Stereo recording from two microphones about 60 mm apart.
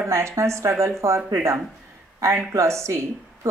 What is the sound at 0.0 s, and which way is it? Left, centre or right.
Speech, right.